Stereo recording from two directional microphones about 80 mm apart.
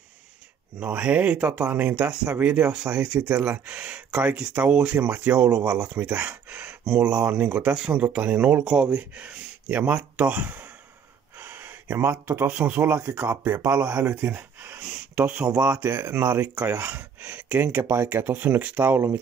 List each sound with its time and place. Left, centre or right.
0.7 s speech: centre
11.3 s gasp: right
12.4 s speech: centre
13.0 s speech: right
13.7 s speech: centre
14.9 s a sound: centre
15.8 s speech: right